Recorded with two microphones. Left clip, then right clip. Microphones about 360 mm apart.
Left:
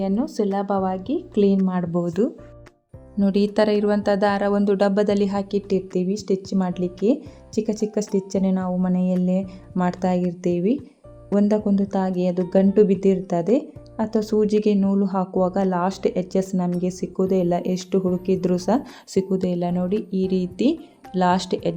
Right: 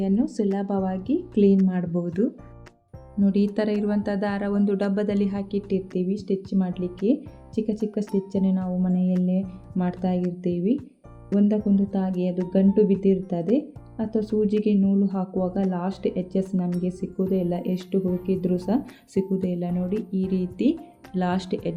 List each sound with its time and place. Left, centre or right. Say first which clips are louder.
0.0 s speech: left 2 dB; left